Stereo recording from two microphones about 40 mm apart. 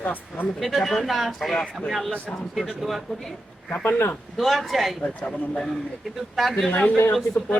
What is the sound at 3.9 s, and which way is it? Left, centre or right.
Speech, left.